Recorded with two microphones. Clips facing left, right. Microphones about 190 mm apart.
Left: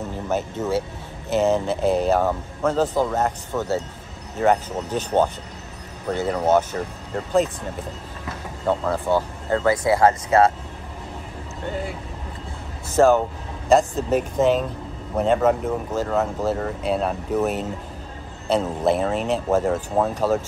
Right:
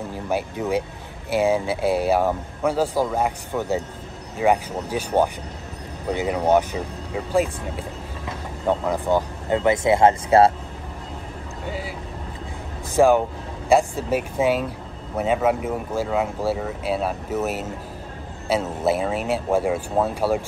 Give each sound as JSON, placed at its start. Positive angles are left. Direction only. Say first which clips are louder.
{"t": 0.3, "sound": "speech", "louder": "even", "side_deg": -10}
{"t": 8.6, "sound": "speech", "louder": "even", "side_deg": -15}
{"t": 12.9, "sound": "speech", "louder": "even", "side_deg": -10}